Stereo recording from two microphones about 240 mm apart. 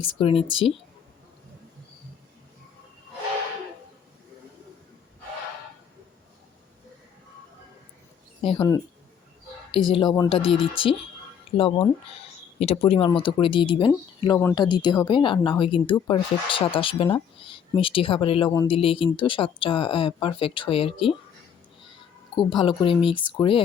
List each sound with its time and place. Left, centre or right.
0.0 s speech: left
8.4 s a sound: left
9.9 s speech: centre
22.4 s speech: left